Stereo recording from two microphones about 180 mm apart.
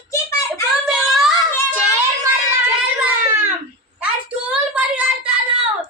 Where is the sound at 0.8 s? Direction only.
Centre (ahead or behind).